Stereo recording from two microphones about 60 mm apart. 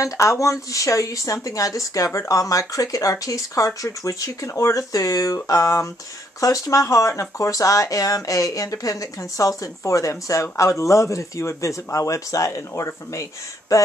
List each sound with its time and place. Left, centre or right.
0.0 s speech: left
4.5 s speech: left